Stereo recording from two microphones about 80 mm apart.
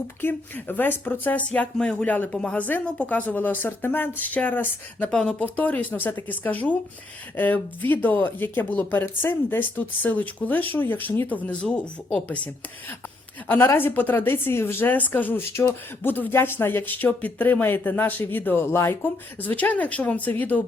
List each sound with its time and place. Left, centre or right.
0.2 s speech: left
13.7 s speech: left